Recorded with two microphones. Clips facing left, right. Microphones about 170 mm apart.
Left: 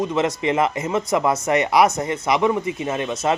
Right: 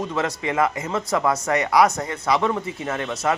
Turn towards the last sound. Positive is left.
turn(degrees=20)  # may be behind; listen again after turning